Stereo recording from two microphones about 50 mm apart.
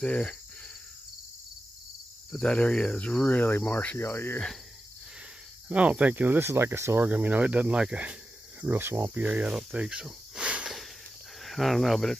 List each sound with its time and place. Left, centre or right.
0.0 s cricket: left
2.3 s speech: centre
3.3 s cricket: left
4.0 s speech: left
5.7 s cricket: right
6.4 s speech: right
7.0 s speech: right
8.6 s speech: right
9.0 s speech: right
10.4 s wheeze: right
11.4 s cricket: centre